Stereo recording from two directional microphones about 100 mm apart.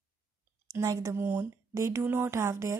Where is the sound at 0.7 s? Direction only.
30° right (ahead or behind).